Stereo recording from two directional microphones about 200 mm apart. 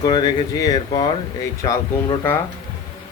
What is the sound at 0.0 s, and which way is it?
Speech, 20° left (ahead or behind).